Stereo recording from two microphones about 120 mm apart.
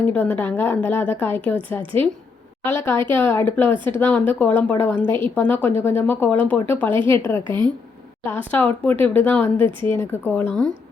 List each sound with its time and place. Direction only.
0.1 s speech: 15° left (ahead or behind)
1.8 s a woman's voice: 45° right (ahead or behind)
2.6 s a woman's voice: 20° left (ahead or behind)
7.4 s speech: 40° right (ahead or behind)
8.2 s speech: 15° left (ahead or behind)